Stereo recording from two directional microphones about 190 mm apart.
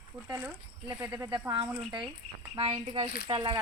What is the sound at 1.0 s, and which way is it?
Speech, 15° right (ahead or behind).